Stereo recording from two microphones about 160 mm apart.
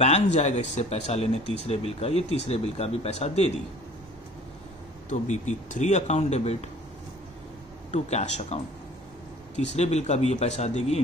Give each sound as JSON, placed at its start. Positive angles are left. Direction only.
{"t": 0.0, "sound": "speech", "side_deg": 45}
{"t": 5.1, "sound": "speech", "side_deg": 50}
{"t": 7.9, "sound": "speech", "side_deg": 45}
{"t": 9.6, "sound": "speech", "side_deg": 45}